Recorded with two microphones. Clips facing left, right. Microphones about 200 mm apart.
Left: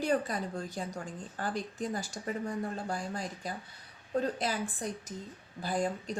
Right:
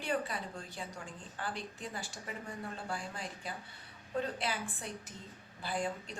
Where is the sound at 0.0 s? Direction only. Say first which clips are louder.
Left 6 dB; 40° left (ahead or behind).